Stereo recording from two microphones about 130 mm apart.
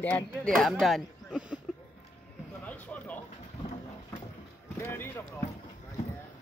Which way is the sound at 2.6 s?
10° left (ahead or behind).